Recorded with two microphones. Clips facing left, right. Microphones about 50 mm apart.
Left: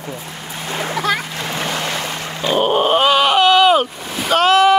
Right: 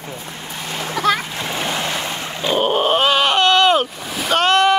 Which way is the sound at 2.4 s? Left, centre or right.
Centre.